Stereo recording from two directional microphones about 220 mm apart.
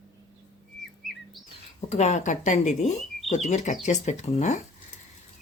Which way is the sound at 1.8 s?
30° left (ahead or behind).